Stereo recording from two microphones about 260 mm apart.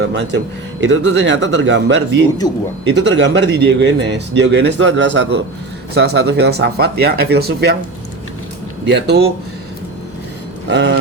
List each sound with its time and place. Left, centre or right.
0.0 s speech: right
8.9 s speech: right
10.7 s speech: right